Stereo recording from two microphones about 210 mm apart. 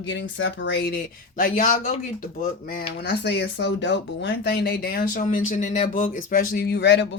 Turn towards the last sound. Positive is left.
turn(degrees=55)  # may be behind; listen again after turning